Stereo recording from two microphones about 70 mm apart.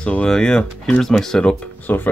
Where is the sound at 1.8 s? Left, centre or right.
Left.